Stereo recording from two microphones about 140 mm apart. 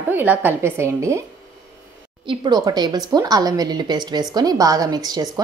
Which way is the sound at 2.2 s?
35° right (ahead or behind).